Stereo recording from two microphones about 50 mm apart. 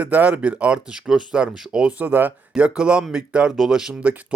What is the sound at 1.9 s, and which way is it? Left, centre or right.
Speech, right.